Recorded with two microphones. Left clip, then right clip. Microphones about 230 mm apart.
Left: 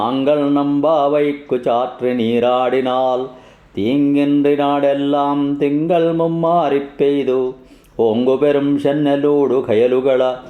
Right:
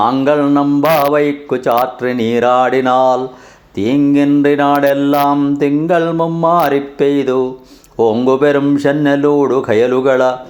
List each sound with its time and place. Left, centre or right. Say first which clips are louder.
0.0 s mantra: right 4 dB; centre